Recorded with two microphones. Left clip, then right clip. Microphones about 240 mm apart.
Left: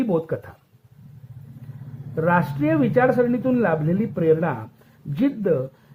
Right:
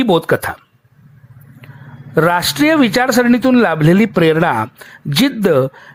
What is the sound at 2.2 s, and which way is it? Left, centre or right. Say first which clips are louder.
A man's voice: right 8 dB; right.